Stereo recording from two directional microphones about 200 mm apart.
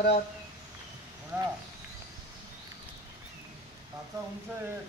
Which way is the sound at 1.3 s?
5° right (ahead or behind).